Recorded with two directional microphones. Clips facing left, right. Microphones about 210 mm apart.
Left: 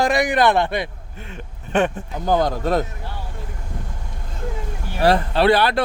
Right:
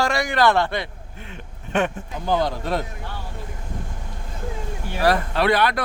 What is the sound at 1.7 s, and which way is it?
Speech, 30° left (ahead or behind).